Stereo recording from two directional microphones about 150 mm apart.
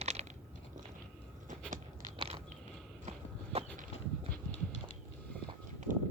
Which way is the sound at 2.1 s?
40° right (ahead or behind).